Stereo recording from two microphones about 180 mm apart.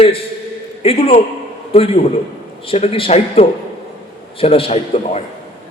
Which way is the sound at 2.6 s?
35° left (ahead or behind).